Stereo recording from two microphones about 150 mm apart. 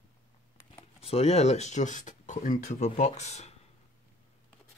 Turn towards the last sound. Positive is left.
turn(degrees=45)  # may be behind; listen again after turning